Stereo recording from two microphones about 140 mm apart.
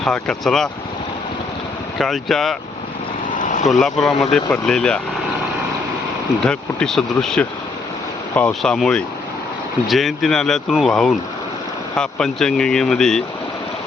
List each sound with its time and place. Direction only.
0.0 s speech: 5° left (ahead or behind)
2.0 s speech: centre (ahead or behind)
3.2 s vehicle: 65° left (ahead or behind)
3.7 s speech: centre (ahead or behind)
6.4 s speech: 5° left (ahead or behind)